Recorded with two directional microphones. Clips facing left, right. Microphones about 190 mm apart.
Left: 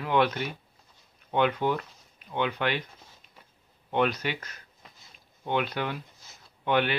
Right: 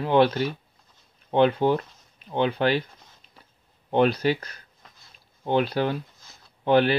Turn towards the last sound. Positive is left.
turn(degrees=-35)  # may be behind; listen again after turning